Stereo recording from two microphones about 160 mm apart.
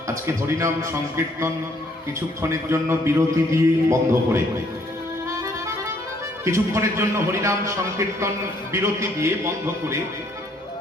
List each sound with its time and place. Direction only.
0.1 s a man's voice: 15° right (ahead or behind)
6.4 s a man's voice: 15° right (ahead or behind)